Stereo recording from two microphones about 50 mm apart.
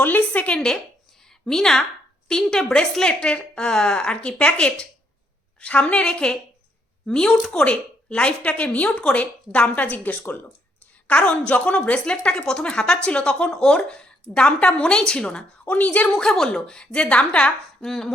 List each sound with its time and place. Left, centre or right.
0.0 s speech: left
0.5 s a woman's voice: centre
3.1 s a woman's voice: left
16.0 s a woman's voice: centre
17.8 s a woman's voice: centre